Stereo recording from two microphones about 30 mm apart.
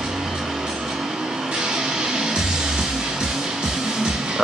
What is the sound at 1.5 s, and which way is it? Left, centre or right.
Music, right.